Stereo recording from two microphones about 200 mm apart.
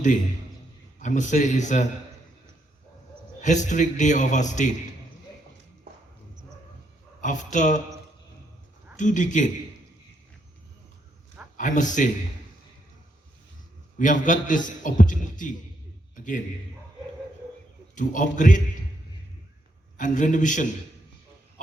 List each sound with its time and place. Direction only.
0.9 s a man's voice: 40° left (ahead or behind)
3.4 s a man's voice: 35° left (ahead or behind)
7.2 s a man's voice: 40° left (ahead or behind)
9.0 s a man's voice: 40° left (ahead or behind)
11.5 s a man's voice: 40° left (ahead or behind)
14.0 s a man's voice: 40° left (ahead or behind)
16.1 s a sound: 40° left (ahead or behind)
17.9 s a man's voice: 40° left (ahead or behind)
20.0 s a man's voice: 40° left (ahead or behind)